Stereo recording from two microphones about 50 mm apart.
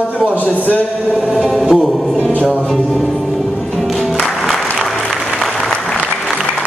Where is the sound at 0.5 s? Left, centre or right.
Left.